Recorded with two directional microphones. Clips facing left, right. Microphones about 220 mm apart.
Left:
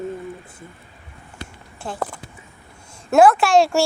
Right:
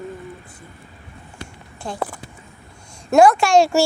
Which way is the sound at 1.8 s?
5° left (ahead or behind).